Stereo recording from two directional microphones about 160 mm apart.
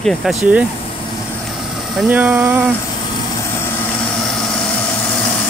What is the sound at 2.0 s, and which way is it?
Speech, 10° right (ahead or behind).